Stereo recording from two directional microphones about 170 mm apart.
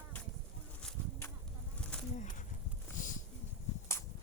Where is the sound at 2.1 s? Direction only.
45° left (ahead or behind).